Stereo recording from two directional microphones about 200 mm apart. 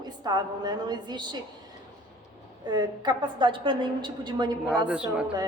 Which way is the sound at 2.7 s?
20° right (ahead or behind).